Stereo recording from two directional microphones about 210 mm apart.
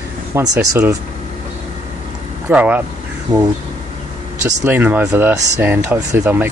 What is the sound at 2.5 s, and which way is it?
Speech, 5° right (ahead or behind).